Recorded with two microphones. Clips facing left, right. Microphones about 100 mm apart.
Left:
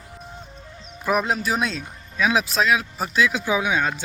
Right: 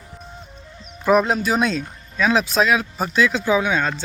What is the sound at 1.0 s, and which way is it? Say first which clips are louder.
Speech: right 5 dB; centre (ahead or behind).